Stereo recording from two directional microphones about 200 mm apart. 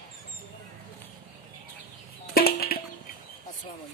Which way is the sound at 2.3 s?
50° left (ahead or behind).